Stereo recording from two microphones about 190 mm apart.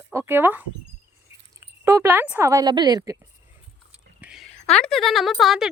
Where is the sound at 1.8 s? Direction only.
15° right (ahead or behind).